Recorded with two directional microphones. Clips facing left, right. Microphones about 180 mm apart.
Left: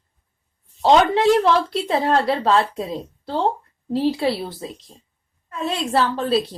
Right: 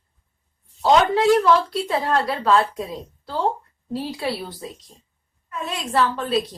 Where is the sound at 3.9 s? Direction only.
30° left (ahead or behind).